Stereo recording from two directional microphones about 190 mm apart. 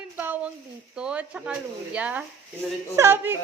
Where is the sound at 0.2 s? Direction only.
10° right (ahead or behind).